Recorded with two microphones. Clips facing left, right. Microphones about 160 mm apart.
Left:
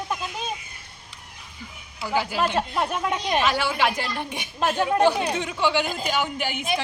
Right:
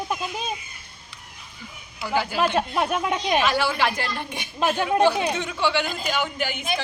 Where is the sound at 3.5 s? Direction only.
15° left (ahead or behind).